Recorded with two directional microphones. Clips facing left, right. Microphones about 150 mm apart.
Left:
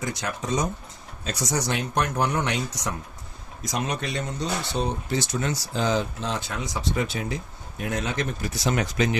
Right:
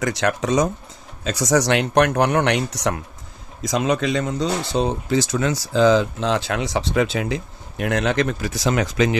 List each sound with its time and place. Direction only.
0.0 s speech: 80° right
3.6 s speech: 90° right